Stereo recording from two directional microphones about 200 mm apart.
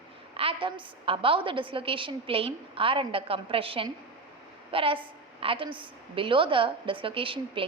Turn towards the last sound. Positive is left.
turn(degrees=-25)  # may be behind; listen again after turning